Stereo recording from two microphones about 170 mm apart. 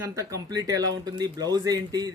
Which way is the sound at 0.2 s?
20° right (ahead or behind).